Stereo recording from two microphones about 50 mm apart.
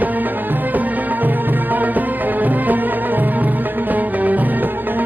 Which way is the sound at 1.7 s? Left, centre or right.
Right.